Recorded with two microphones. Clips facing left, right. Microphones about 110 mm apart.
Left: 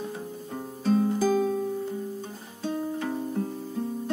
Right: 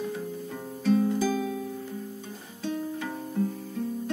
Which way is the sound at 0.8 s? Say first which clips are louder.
Left 1 dB; 30° left (ahead or behind).